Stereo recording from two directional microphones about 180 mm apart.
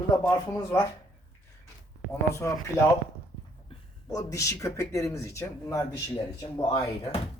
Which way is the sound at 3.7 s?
30° left (ahead or behind).